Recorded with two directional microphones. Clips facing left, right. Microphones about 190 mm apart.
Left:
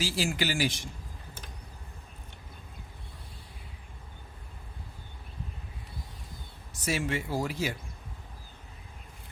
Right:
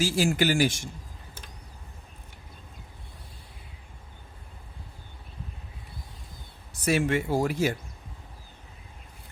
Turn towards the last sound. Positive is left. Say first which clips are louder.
# right 6 dB
turn(degrees=-50)  # may be behind; listen again after turning